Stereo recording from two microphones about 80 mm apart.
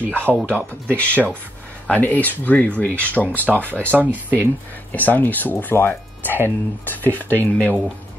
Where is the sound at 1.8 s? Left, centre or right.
Left.